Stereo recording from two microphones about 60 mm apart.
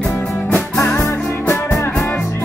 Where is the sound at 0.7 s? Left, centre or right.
Left.